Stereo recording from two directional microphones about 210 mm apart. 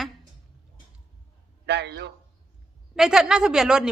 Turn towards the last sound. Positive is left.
turn(degrees=-5)  # may be behind; listen again after turning